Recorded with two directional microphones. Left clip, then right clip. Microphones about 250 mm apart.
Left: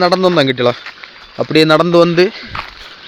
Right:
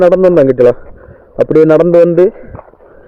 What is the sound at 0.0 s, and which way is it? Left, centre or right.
Speech, left.